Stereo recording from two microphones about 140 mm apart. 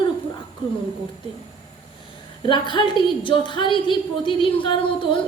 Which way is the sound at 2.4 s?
35° left (ahead or behind).